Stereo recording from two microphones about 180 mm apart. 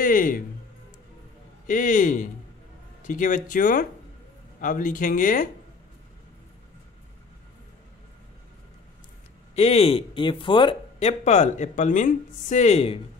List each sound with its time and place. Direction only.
0.0 s speech: 50° left (ahead or behind)
1.7 s speech: 45° left (ahead or behind)
9.6 s speech: 35° left (ahead or behind)